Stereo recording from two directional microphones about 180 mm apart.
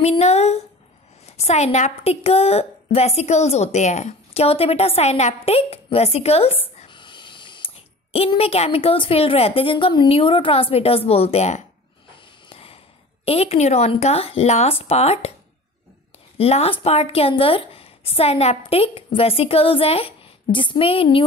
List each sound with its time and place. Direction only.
0.0 s a sound: 35° left (ahead or behind)
1.2 s a woman's voice: 35° left (ahead or behind)
16.3 s a woman's voice: 35° left (ahead or behind)